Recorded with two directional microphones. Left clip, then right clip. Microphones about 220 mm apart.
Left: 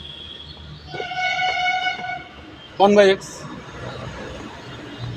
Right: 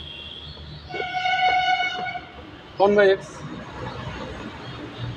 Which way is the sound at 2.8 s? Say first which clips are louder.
Left 3 dB; 50° left (ahead or behind).